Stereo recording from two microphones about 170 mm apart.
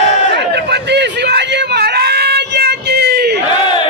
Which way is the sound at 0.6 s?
80° right.